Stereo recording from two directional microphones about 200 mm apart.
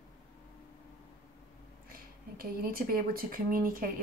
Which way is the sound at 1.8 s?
45° right (ahead or behind).